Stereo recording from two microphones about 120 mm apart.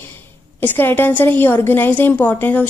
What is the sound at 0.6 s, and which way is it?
A woman's voice, 15° left (ahead or behind).